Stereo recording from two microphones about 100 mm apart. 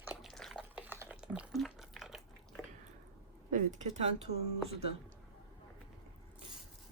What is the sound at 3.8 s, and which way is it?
Speech, 90° right.